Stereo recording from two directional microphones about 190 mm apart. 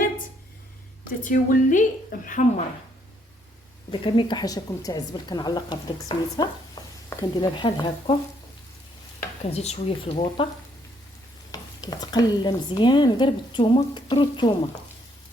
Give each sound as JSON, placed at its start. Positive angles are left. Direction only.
{"t": 1.2, "sound": "a woman's voice", "side_deg": 45}
{"t": 4.0, "sound": "speech", "side_deg": 25}
{"t": 6.8, "sound": "stir", "side_deg": 25}
{"t": 7.1, "sound": "speech", "side_deg": 20}
{"t": 9.4, "sound": "speech", "side_deg": 35}
{"t": 11.5, "sound": "speech", "side_deg": 20}